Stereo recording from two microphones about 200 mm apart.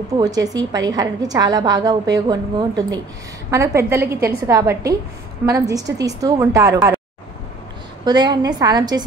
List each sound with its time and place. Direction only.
0.2 s a woman's voice: 20° right (ahead or behind)
8.0 s a woman's voice: 20° right (ahead or behind)